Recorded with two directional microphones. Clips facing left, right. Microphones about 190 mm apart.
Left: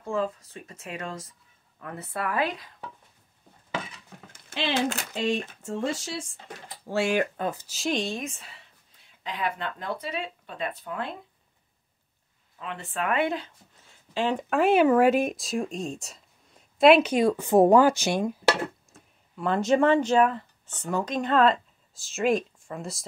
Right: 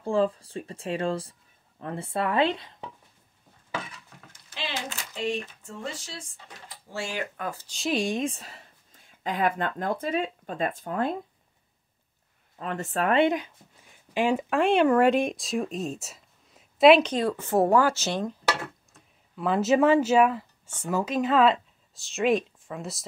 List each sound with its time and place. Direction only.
0.0 s speech: 30° right (ahead or behind)
5.2 s speech: 85° left
6.9 s speech: 65° left (ahead or behind)
7.5 s speech: 5° left (ahead or behind)
7.9 s speech: 10° right (ahead or behind)
8.2 s speech: 35° right (ahead or behind)
12.5 s speech: 45° right (ahead or behind)
13.2 s speech: 15° right (ahead or behind)
14.5 s speech: 5° left (ahead or behind)
17.1 s speech: 15° left (ahead or behind)
18.9 s speech: centre (ahead or behind)